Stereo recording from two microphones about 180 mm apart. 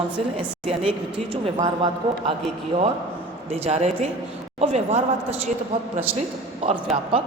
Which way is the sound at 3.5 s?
35° right (ahead or behind).